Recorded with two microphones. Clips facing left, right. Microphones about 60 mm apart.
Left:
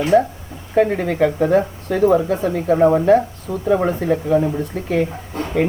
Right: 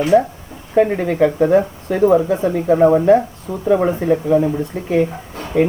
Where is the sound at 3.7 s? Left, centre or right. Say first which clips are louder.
Right 2 dB; centre.